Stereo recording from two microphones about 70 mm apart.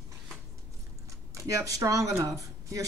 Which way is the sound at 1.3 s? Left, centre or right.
Right.